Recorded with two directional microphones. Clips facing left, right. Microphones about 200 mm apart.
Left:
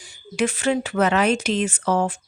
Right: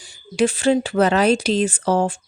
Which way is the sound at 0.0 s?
30° right (ahead or behind).